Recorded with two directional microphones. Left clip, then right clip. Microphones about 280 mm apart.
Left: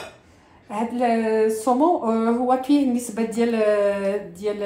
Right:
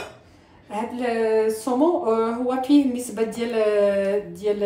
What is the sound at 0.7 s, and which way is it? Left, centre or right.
A woman's voice, left.